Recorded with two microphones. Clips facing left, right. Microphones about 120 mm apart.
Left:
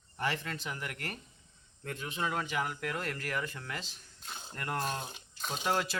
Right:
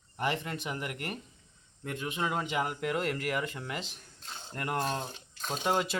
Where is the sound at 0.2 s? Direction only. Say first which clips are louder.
Right 3 dB; 20° right (ahead or behind).